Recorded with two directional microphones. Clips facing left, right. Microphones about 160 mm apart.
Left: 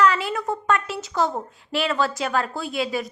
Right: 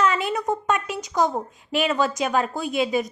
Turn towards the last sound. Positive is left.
turn(degrees=-20)  # may be behind; listen again after turning